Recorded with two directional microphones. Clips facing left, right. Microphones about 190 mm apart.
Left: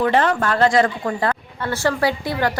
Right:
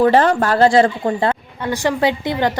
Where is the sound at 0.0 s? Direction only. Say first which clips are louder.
Right 5 dB; 35° right (ahead or behind).